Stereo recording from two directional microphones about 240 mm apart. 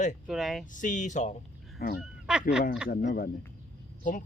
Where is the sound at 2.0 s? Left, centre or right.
Centre.